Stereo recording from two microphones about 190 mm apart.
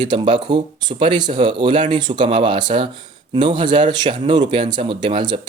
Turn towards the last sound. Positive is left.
turn(degrees=-25)  # may be behind; listen again after turning